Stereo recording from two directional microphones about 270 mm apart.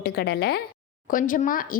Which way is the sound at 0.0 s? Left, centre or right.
Left.